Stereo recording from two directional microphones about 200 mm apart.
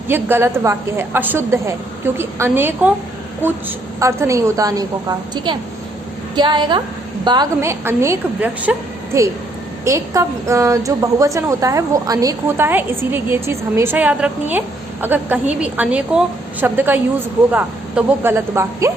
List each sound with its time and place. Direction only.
0.1 s a woman's voice: 10° right (ahead or behind)
4.0 s a woman's voice: 15° right (ahead or behind)
9.8 s a woman's voice: 15° right (ahead or behind)